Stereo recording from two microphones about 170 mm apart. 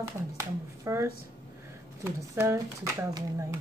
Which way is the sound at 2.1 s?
15° right (ahead or behind).